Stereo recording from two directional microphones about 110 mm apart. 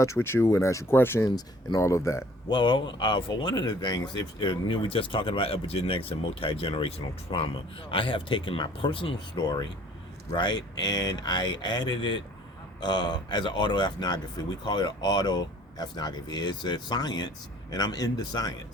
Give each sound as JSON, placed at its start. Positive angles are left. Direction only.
{"t": 0.0, "sound": "speech", "side_deg": 25}
{"t": 2.5, "sound": "speech", "side_deg": 45}